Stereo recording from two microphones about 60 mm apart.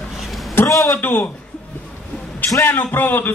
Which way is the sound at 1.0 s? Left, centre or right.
Left.